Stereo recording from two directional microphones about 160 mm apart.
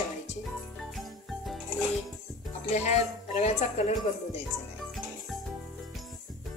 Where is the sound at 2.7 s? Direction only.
45° left (ahead or behind).